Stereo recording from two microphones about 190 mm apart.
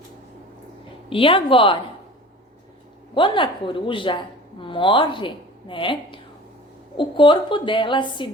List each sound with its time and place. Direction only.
1.1 s a woman's voice: 30° left (ahead or behind)
3.2 s a woman's voice: 25° left (ahead or behind)